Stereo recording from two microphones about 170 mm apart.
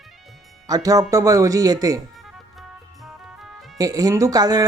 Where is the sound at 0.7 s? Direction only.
20° right (ahead or behind).